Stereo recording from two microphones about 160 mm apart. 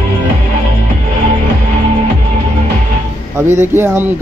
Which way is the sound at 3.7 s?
15° right (ahead or behind).